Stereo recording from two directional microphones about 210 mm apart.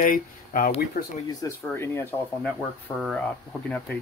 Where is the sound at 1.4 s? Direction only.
10° left (ahead or behind).